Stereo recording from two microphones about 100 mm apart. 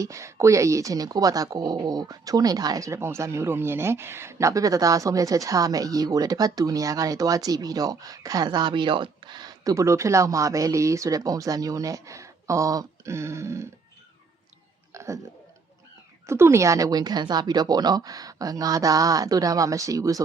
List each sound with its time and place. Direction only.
0.0 s speech: 30° right (ahead or behind)
8.4 s speech: 50° right (ahead or behind); by 13.7 s 30° right (ahead or behind)
14.9 s a sound: 30° right (ahead or behind)
16.2 s speech: 25° right (ahead or behind)